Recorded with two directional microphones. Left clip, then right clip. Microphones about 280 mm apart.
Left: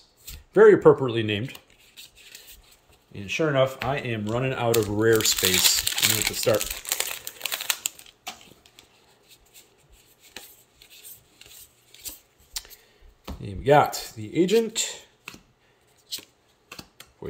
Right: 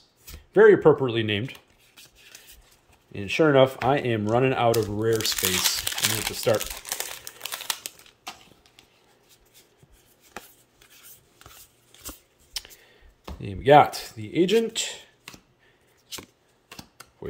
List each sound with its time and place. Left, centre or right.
0.5 s speech: centre
3.1 s speech: centre
5.4 s crumpling: centre
12.6 s a sound: centre
13.4 s speech: centre